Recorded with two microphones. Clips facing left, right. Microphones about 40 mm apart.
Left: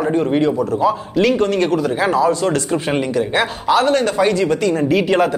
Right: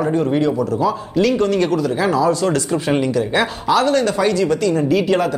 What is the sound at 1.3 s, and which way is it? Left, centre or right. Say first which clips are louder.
Speech: even; centre.